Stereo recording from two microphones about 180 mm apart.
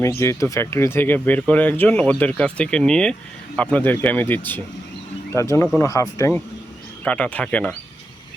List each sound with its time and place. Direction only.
0.2 s speech: 15° left (ahead or behind)